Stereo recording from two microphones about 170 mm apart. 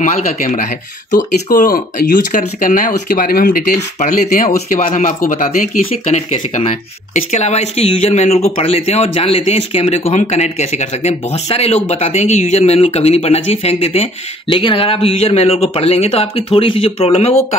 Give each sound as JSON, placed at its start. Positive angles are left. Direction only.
{"t": 0.0, "sound": "speech", "side_deg": 50}